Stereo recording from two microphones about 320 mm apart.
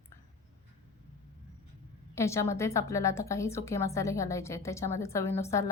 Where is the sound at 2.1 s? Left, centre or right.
Centre.